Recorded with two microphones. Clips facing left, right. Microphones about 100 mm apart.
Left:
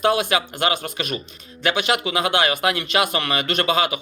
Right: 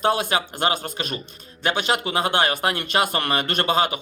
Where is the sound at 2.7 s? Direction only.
45° right (ahead or behind).